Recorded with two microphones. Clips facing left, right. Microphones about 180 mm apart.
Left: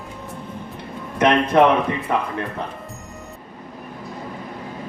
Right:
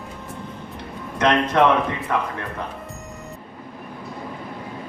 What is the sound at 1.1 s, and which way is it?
A man's voice, 15° left (ahead or behind).